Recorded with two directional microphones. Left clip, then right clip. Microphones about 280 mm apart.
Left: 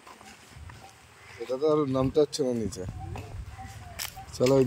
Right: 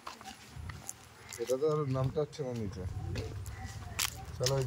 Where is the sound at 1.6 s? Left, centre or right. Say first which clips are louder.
Left 10 dB; left.